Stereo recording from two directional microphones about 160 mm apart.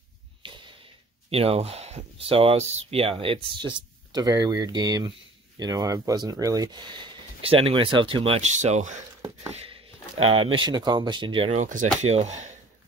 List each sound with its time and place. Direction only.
0.4 s a sound: 30° right (ahead or behind)
1.3 s speech: 35° right (ahead or behind)
11.6 s speech: 50° right (ahead or behind)